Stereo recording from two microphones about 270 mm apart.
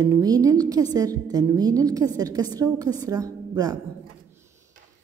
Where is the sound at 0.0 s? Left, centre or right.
Centre.